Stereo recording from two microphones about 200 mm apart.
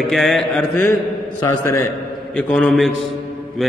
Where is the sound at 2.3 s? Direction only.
5° left (ahead or behind).